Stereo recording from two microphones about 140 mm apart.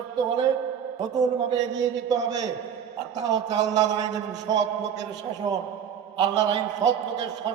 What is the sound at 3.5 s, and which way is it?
Speech, 25° right (ahead or behind).